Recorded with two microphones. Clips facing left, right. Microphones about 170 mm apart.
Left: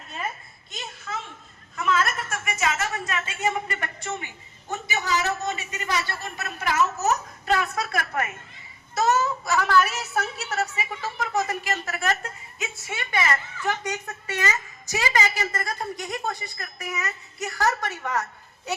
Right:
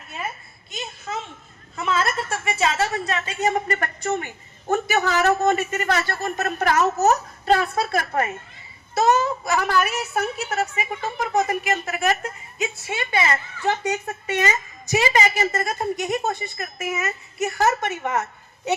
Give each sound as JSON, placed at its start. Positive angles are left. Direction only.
{"t": 1.7, "sound": "a woman's voice", "side_deg": -30}
{"t": 4.7, "sound": "a man's voice", "side_deg": -55}
{"t": 9.2, "sound": "a woman's voice", "side_deg": -55}
{"t": 9.6, "sound": "speech", "side_deg": -15}
{"t": 9.9, "sound": "a woman's voice", "side_deg": -55}
{"t": 11.4, "sound": "speech", "side_deg": -15}
{"t": 12.6, "sound": "a woman's voice", "side_deg": -30}